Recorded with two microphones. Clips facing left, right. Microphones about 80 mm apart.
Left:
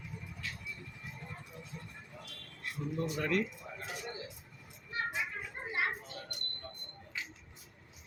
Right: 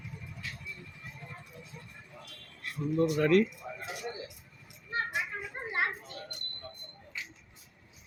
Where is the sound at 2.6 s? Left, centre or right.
Right.